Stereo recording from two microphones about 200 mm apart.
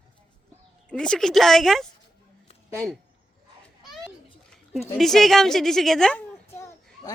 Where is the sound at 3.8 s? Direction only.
Centre (ahead or behind).